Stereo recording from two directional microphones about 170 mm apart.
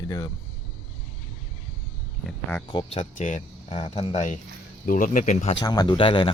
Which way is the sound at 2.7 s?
35° left (ahead or behind).